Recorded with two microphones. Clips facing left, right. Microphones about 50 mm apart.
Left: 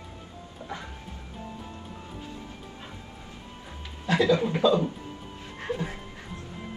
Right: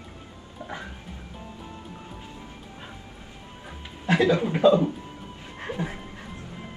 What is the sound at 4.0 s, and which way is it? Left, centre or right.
Speech, right.